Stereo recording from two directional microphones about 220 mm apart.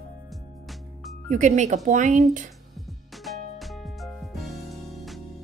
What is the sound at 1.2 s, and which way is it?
A woman's voice, 35° right (ahead or behind).